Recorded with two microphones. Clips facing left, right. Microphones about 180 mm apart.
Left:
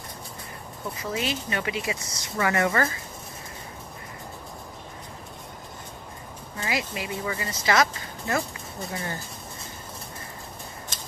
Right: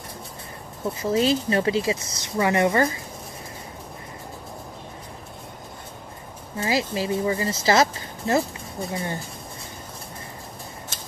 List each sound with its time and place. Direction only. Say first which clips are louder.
0.8 s speech: right 8 dB; 30° right (ahead or behind)
6.6 s speech: right 6 dB; 30° right (ahead or behind)